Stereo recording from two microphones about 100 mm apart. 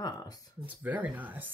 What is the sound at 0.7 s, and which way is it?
Speech, 15° right (ahead or behind).